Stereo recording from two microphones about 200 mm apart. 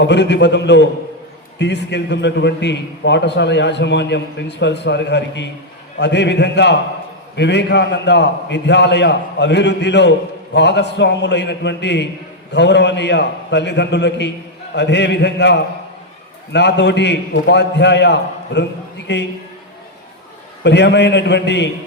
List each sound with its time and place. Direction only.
0.0 s a man's voice: 60° left (ahead or behind)
20.7 s a man's voice: 60° left (ahead or behind)